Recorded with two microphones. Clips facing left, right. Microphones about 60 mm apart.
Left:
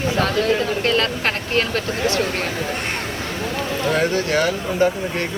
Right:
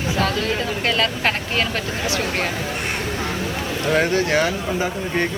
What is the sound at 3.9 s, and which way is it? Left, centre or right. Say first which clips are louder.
Speech: right 2 dB; centre.